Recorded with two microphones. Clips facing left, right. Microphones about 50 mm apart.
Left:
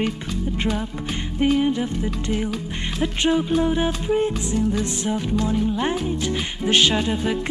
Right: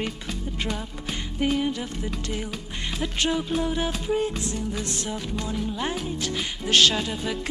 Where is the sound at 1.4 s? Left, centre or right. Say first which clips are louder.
Left 6 dB; centre.